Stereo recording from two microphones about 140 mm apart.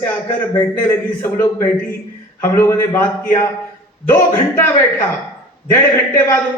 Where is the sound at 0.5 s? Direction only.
15° left (ahead or behind).